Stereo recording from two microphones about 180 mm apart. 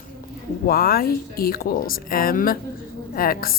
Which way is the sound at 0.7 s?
55° left (ahead or behind).